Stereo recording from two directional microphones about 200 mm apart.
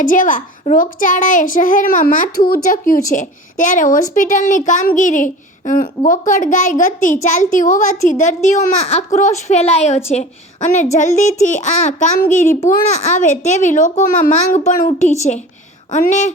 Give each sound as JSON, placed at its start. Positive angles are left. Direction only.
{"t": 0.0, "sound": "a woman's voice", "side_deg": 40}